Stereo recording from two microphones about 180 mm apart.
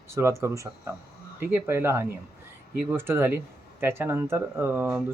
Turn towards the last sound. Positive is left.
turn(degrees=-10)  # may be behind; listen again after turning